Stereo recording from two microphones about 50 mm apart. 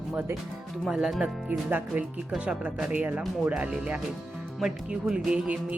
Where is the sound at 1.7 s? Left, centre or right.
Right.